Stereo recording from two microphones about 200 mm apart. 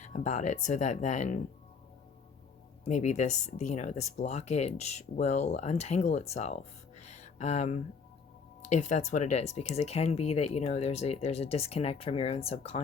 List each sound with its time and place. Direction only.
0.0 s speech: 40° left (ahead or behind)
2.8 s speech: 35° left (ahead or behind)